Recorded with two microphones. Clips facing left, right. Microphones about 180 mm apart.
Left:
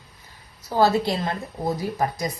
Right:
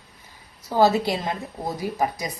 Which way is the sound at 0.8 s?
15° right (ahead or behind).